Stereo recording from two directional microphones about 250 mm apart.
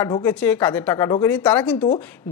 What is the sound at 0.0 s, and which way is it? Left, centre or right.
A man's voice, centre.